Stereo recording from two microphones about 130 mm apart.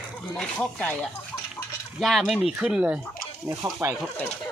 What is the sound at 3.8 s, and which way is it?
Speech, 20° right (ahead or behind).